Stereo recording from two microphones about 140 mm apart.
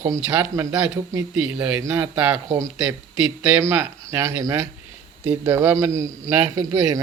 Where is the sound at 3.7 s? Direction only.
15° right (ahead or behind).